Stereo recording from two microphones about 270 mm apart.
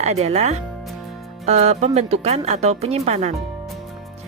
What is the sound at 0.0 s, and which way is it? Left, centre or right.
Speech, right.